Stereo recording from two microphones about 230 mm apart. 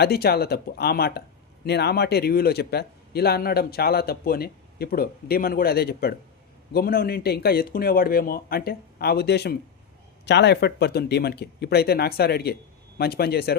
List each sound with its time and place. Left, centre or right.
0.0 s speech: left